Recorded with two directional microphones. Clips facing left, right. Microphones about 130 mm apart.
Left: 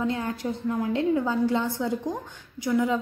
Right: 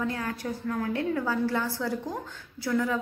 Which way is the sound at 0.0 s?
20° left (ahead or behind).